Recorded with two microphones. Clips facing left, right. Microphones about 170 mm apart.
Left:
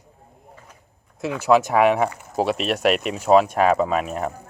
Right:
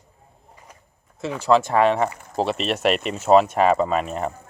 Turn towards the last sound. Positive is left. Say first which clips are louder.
# even
turn(degrees=5)  # may be behind; listen again after turning